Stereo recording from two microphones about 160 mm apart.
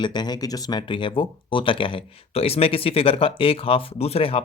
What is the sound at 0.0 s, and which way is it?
Speech, 25° left (ahead or behind).